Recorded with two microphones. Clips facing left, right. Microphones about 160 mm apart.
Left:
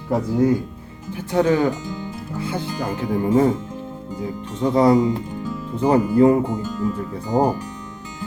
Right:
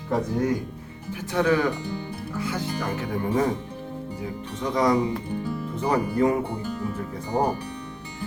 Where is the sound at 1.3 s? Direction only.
25° left (ahead or behind).